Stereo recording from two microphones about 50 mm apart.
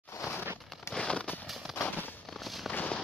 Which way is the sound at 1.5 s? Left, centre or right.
Centre.